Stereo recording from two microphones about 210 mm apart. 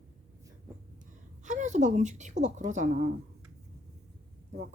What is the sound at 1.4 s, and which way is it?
Speech, 35° right (ahead or behind).